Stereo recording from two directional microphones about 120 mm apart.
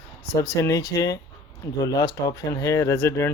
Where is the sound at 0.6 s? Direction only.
30° left (ahead or behind).